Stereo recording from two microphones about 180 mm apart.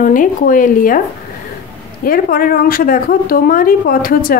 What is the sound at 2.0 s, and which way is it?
Speech, 50° left (ahead or behind).